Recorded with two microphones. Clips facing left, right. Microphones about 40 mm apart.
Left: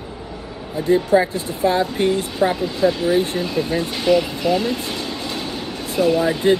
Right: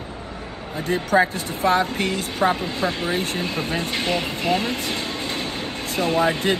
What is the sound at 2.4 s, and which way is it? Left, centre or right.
Speech, right.